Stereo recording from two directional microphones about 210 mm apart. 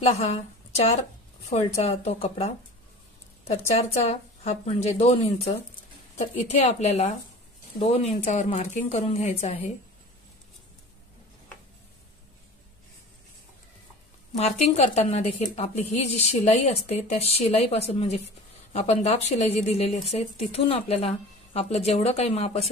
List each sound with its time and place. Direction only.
0.0 s a woman's voice: 30° left (ahead or behind)
14.3 s a woman's voice: 30° left (ahead or behind)